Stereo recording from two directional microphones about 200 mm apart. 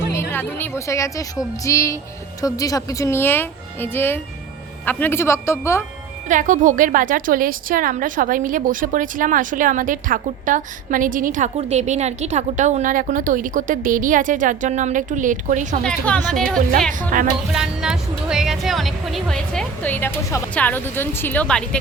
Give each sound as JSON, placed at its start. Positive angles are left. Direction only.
{"t": 0.1, "sound": "speech", "side_deg": 10}
{"t": 6.2, "sound": "a woman's voice", "side_deg": -40}
{"t": 15.8, "sound": "speech", "side_deg": 5}
{"t": 16.9, "sound": "a woman's voice", "side_deg": -40}
{"t": 17.5, "sound": "speech", "side_deg": -5}